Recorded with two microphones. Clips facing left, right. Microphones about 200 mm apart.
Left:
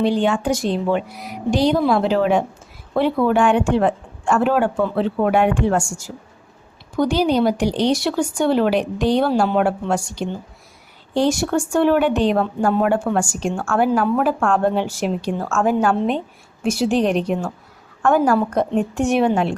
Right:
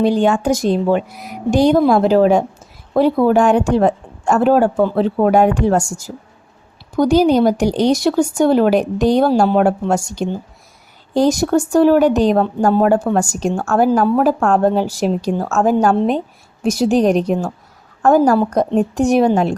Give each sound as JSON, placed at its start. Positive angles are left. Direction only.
{"t": 0.0, "sound": "a woman's voice", "side_deg": -45}